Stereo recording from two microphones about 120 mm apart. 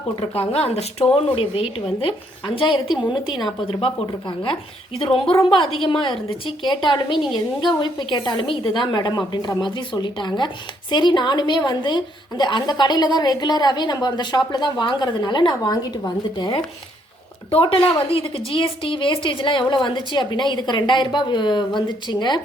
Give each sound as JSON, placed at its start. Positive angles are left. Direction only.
{"t": 0.2, "sound": "a woman's voice", "side_deg": 55}
{"t": 4.9, "sound": "a woman's voice", "side_deg": 50}
{"t": 6.7, "sound": "a woman's voice", "side_deg": 40}